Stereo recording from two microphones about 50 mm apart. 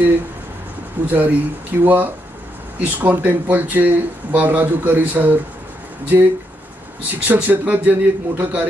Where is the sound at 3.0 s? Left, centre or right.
Right.